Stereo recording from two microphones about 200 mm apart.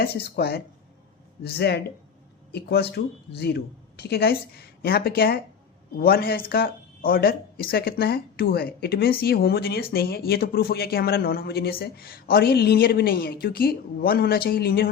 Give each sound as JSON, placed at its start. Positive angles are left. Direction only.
{"t": 0.0, "sound": "speech", "side_deg": 50}